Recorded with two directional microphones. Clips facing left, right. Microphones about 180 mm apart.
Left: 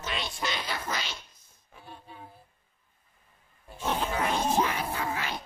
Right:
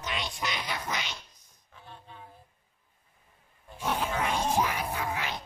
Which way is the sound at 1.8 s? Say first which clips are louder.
Left 2 dB; 10° left (ahead or behind).